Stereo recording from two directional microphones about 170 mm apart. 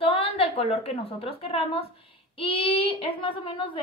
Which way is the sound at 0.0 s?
35° left (ahead or behind).